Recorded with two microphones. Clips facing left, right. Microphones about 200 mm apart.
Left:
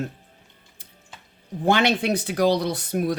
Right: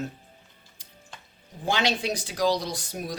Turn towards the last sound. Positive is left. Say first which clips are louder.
# left 9 dB
turn(degrees=60)  # may be behind; listen again after turning